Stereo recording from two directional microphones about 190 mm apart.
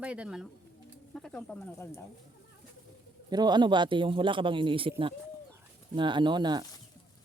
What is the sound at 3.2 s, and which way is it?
Speech, 20° right (ahead or behind).